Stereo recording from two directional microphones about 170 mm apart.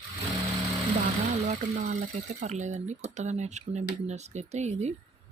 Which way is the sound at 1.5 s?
40° right (ahead or behind).